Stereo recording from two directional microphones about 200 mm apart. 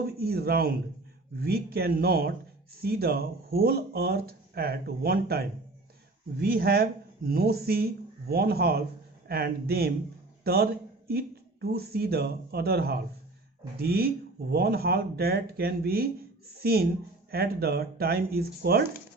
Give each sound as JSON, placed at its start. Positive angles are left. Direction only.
{"t": 0.0, "sound": "a man's voice", "side_deg": -50}